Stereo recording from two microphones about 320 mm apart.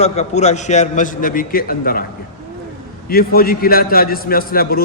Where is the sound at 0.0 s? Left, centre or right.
Left.